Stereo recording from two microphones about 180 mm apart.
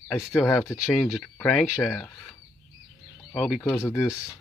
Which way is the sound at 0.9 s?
Centre (ahead or behind).